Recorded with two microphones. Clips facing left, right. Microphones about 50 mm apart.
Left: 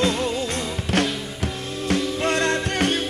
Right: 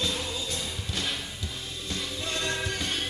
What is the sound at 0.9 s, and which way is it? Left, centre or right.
Music, left.